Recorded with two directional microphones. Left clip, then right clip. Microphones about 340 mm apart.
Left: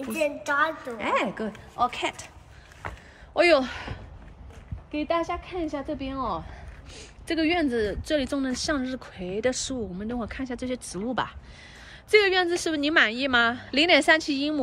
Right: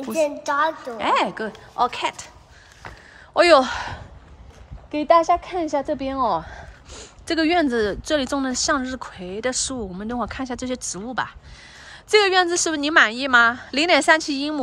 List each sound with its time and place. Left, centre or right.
0.1 s a woman's voice: right
0.9 s speech: centre
3.3 s speech: centre